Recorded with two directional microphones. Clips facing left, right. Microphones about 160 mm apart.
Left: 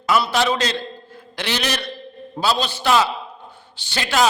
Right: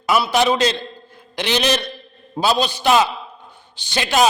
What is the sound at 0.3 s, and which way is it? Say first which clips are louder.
A man's voice: right 3 dB; 15° right (ahead or behind).